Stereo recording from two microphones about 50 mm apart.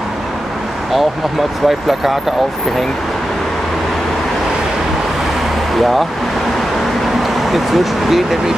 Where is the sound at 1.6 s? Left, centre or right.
Centre.